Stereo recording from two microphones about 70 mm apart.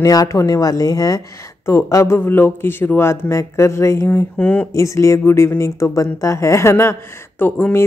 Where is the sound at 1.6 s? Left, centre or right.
Left.